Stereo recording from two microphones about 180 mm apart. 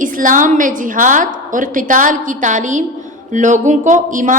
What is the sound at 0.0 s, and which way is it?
A woman's voice, 45° right (ahead or behind).